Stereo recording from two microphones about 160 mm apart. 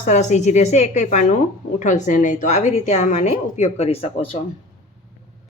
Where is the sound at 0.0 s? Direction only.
50° left (ahead or behind).